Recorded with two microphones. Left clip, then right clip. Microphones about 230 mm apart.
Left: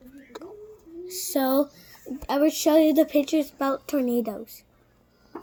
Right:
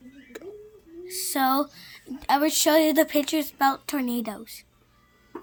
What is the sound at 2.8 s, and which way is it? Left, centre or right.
Speech, right.